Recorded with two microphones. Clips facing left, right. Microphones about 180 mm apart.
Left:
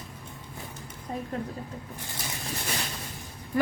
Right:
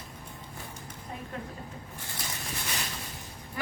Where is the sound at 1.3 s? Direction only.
40° left (ahead or behind).